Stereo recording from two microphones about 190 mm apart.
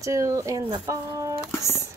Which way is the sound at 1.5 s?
15° left (ahead or behind).